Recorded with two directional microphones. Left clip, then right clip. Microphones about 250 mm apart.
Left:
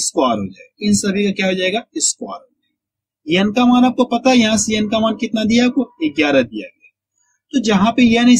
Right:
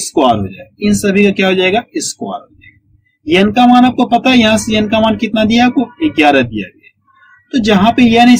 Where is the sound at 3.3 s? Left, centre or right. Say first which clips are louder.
Right 6 dB; centre.